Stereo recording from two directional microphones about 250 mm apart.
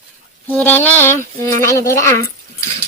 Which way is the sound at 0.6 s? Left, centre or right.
Centre.